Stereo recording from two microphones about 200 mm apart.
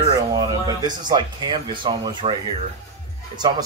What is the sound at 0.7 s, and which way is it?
Speech, 20° right (ahead or behind).